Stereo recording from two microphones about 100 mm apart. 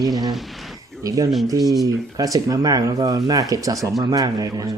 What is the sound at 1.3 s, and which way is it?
Speech, centre (ahead or behind).